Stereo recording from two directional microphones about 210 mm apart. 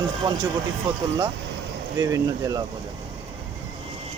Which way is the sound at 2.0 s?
15° right (ahead or behind).